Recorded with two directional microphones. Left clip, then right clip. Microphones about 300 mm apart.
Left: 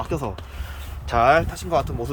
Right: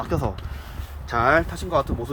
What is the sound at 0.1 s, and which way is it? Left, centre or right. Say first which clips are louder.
Speech: right 1 dB; centre.